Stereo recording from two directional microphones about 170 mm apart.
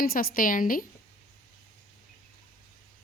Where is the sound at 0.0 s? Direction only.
60° left (ahead or behind).